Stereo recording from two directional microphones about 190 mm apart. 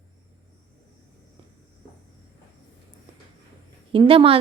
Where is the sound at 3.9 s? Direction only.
25° right (ahead or behind).